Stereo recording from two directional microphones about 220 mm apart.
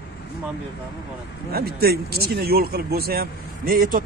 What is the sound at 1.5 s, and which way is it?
Speech, 45° right (ahead or behind).